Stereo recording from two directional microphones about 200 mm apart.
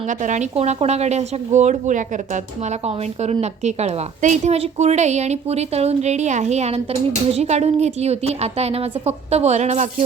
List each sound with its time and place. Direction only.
0.1 s a woman's voice: 40° right (ahead or behind)